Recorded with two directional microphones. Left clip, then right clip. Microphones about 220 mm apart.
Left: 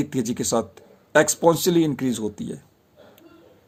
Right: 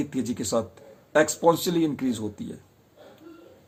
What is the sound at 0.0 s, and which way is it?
Speech, 45° left (ahead or behind).